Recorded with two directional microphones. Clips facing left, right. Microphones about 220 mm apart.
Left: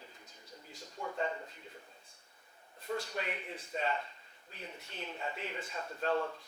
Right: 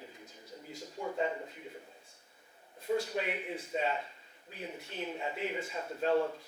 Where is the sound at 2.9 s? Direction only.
10° right (ahead or behind).